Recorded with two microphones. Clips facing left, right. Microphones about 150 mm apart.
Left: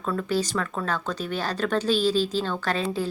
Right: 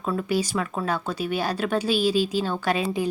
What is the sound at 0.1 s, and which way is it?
Speech, 15° right (ahead or behind).